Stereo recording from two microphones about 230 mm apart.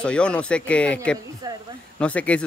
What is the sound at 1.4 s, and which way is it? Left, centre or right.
Speech, centre.